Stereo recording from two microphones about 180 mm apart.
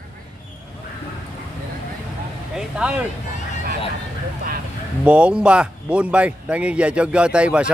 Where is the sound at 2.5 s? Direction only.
5° right (ahead or behind).